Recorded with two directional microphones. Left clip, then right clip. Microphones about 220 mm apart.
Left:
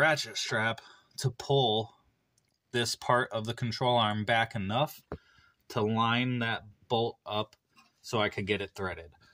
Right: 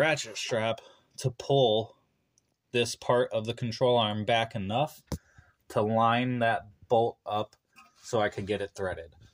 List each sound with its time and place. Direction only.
0.0 s speech: 20° left (ahead or behind)
8.4 s speech: 20° left (ahead or behind)